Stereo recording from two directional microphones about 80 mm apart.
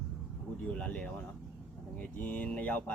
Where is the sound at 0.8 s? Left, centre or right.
Centre.